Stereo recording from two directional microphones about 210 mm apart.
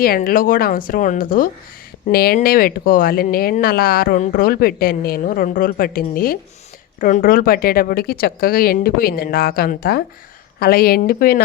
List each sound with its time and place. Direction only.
0.0 s a woman's voice: 45° left (ahead or behind)